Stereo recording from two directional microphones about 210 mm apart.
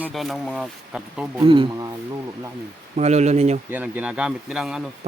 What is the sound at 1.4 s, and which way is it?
Speech, 25° right (ahead or behind).